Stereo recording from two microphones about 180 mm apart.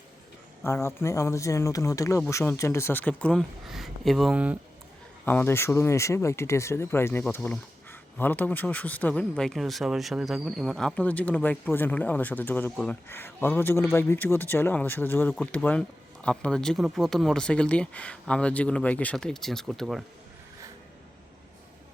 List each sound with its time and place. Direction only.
0.6 s speech: 15° left (ahead or behind); by 4.5 s 5° right (ahead or behind)
5.2 s speech: 10° left (ahead or behind)